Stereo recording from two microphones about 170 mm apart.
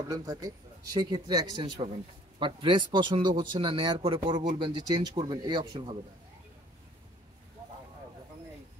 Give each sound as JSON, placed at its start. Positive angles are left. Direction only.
{"t": 0.1, "sound": "speech", "side_deg": -20}